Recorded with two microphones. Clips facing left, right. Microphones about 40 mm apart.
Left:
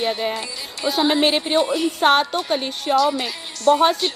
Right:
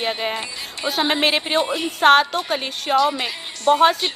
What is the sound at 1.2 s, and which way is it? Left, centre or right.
Speech, right.